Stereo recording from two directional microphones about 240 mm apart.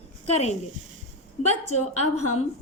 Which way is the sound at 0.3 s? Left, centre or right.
Left.